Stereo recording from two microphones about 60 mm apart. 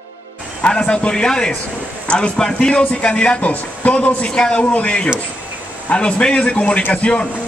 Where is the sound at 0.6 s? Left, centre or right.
Centre.